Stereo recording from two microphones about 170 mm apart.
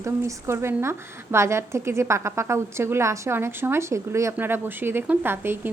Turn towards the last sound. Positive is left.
turn(degrees=-15)  # may be behind; listen again after turning